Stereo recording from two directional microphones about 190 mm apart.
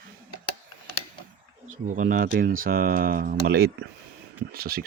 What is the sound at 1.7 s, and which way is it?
Speech, 45° right (ahead or behind).